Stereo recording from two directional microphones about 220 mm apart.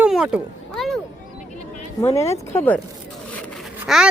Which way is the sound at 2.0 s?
15° left (ahead or behind).